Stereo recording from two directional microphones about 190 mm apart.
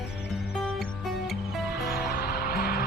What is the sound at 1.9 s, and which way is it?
Music, 55° left (ahead or behind).